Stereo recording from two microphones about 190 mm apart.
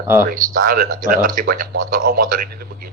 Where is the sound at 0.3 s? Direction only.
50° right (ahead or behind).